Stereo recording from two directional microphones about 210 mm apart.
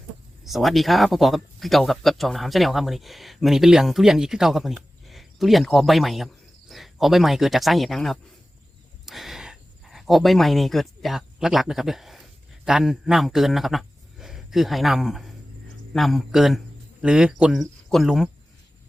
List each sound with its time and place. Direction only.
0.4 s speech: centre (ahead or behind)